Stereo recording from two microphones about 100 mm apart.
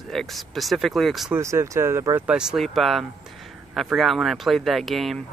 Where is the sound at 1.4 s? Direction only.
30° right (ahead or behind).